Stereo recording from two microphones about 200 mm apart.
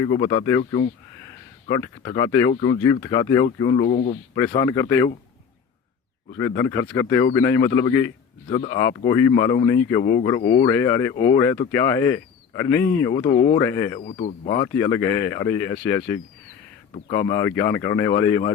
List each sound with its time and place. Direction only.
0.0 s a man's voice: 25° left (ahead or behind)
1.6 s a man's voice: 20° left (ahead or behind)
3.7 s speech: 35° left (ahead or behind)
4.4 s speech: 15° left (ahead or behind)
6.3 s a man's voice: 15° left (ahead or behind)
9.0 s speech: 15° left (ahead or behind)
10.0 s a man's voice: 25° left (ahead or behind)
11.1 s a man's voice: 30° left (ahead or behind)
11.7 s speech: 15° left (ahead or behind)
13.1 s a man's voice: 30° left (ahead or behind)
13.6 s speech: 15° left (ahead or behind)
14.0 s speech: 35° left (ahead or behind)
14.6 s speech: 15° left (ahead or behind)